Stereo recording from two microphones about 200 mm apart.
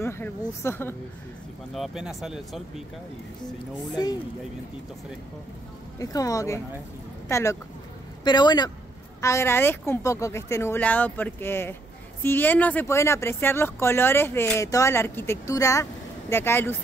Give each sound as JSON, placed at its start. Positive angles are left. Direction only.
{"t": 0.0, "sound": "speech", "side_deg": 10}
{"t": 1.7, "sound": "speech", "side_deg": 0}
{"t": 3.9, "sound": "speech", "side_deg": 20}
{"t": 5.9, "sound": "speech", "side_deg": 15}